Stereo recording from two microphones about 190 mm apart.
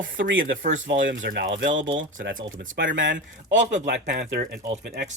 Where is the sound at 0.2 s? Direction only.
80° right.